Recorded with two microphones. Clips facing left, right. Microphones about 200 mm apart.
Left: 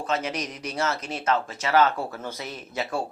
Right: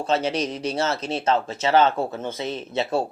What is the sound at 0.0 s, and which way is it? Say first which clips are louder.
Speech: right 5 dB; 30° right (ahead or behind).